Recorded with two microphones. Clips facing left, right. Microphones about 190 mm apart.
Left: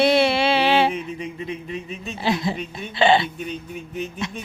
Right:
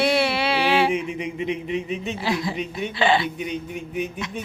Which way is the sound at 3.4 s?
15° right (ahead or behind).